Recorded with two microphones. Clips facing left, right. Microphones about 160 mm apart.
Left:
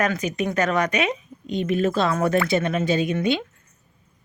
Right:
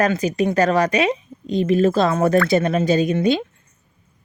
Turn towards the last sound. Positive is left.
turn(degrees=-35)  # may be behind; listen again after turning